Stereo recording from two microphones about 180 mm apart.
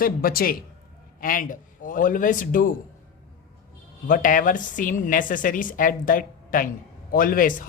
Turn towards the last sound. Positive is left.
turn(degrees=50)  # may be behind; listen again after turning